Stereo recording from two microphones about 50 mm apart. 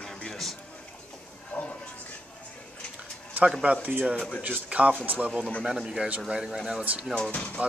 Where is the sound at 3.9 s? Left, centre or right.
Right.